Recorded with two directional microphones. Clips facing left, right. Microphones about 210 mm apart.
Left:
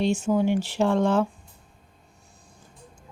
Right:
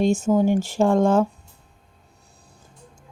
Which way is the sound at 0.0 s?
45° right (ahead or behind).